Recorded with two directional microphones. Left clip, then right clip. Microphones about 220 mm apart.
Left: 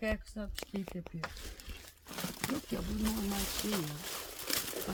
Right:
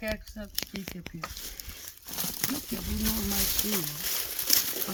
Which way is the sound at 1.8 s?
55° right (ahead or behind).